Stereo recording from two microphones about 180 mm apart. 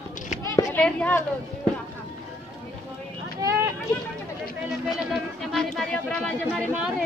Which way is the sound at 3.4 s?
20° right (ahead or behind).